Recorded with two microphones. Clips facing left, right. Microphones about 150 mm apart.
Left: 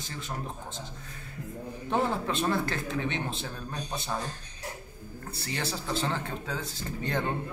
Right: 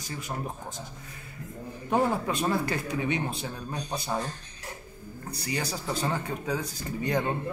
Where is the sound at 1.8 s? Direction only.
10° right (ahead or behind).